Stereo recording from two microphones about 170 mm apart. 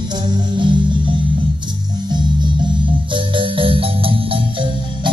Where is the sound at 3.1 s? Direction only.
30° right (ahead or behind).